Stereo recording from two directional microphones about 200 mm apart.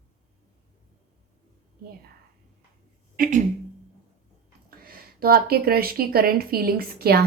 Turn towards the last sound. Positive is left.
turn(degrees=-50)  # may be behind; listen again after turning